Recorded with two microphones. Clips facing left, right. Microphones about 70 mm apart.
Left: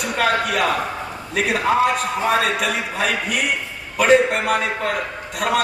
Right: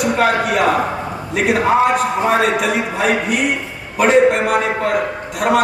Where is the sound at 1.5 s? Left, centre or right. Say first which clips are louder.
Right 4 dB; right.